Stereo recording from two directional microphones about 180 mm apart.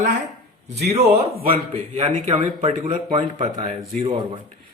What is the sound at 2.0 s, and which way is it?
A man's voice, 35° right (ahead or behind).